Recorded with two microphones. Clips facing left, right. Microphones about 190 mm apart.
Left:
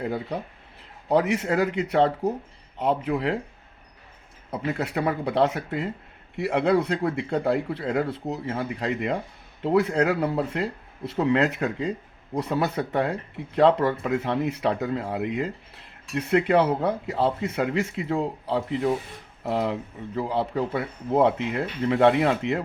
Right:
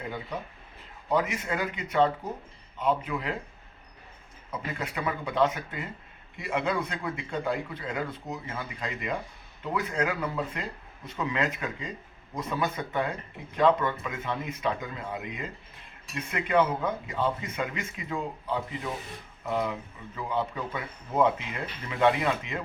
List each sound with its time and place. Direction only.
0.0 s speech: 35° left (ahead or behind)
1.1 s speech: 70° left (ahead or behind)
4.6 s speech: 70° left (ahead or behind)